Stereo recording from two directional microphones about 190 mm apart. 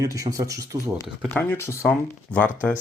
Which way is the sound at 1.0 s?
10° left (ahead or behind).